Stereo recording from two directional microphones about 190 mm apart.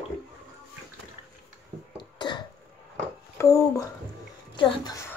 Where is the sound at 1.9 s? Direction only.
25° left (ahead or behind).